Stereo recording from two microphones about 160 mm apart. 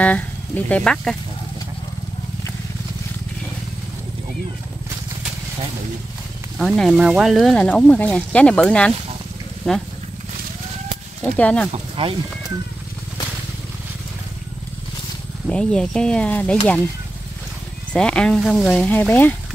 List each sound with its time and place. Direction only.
0.0 s speech: 10° left (ahead or behind)
6.6 s speech: centre (ahead or behind)
11.3 s speech: 10° left (ahead or behind)
11.7 s speech: 35° right (ahead or behind)
15.4 s speech: 5° left (ahead or behind)
17.9 s speech: 5° left (ahead or behind)